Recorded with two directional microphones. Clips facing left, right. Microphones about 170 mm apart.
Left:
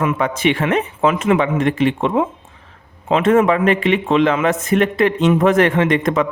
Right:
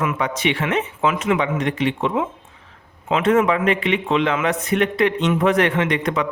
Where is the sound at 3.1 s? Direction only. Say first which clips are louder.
Left 4 dB; 35° left (ahead or behind).